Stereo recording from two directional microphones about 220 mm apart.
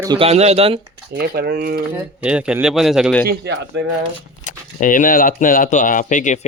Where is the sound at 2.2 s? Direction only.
5° right (ahead or behind).